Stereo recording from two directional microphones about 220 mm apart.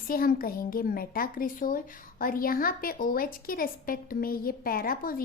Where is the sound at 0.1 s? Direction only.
40° left (ahead or behind).